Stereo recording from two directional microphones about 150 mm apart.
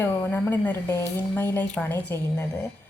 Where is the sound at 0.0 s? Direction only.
10° left (ahead or behind).